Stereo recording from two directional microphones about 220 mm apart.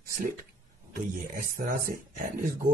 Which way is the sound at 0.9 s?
40° right (ahead or behind).